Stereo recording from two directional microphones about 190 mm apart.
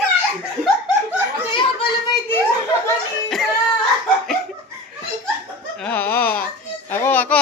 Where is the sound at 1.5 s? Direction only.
25° left (ahead or behind).